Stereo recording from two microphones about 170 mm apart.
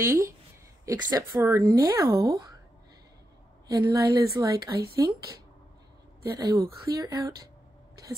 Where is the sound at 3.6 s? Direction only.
20° right (ahead or behind).